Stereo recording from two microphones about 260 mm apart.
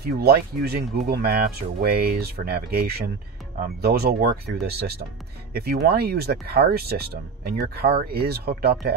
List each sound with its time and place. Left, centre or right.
0.2 s speech: right